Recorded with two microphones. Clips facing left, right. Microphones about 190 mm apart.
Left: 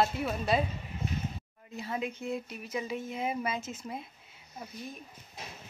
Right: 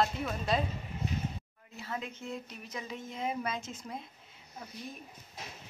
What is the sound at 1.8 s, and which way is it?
A woman's voice, 15° left (ahead or behind).